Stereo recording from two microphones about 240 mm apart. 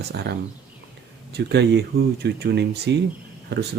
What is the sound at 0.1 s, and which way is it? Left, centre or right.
Speech, right.